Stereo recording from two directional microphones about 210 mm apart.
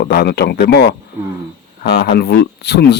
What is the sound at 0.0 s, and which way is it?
Speech, 45° left (ahead or behind).